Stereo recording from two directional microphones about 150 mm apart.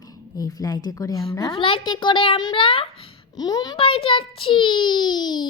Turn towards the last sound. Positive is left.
turn(degrees=30)  # may be behind; listen again after turning